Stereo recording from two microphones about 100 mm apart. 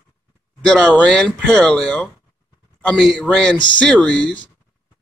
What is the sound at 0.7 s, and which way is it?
A man's voice, 10° left (ahead or behind).